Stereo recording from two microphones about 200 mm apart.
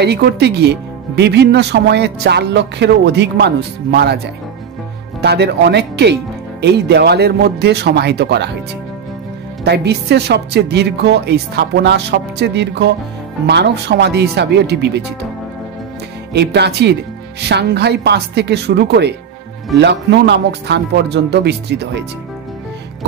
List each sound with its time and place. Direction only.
0.0 s speech: 55° right (ahead or behind)
5.2 s speech: 55° right (ahead or behind)
9.7 s speech: 55° right (ahead or behind)
16.3 s speech: 55° right (ahead or behind)